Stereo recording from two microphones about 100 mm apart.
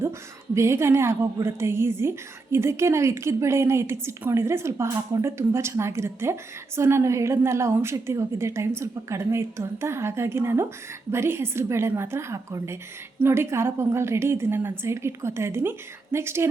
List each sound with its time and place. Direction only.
0.5 s a woman's voice: 30° right (ahead or behind)